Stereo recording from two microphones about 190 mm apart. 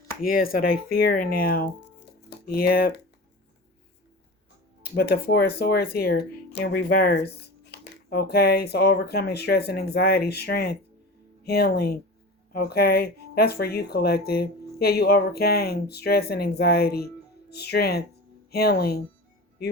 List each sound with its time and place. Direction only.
0.2 s speech: 50° left (ahead or behind)
4.9 s speech: 55° left (ahead or behind)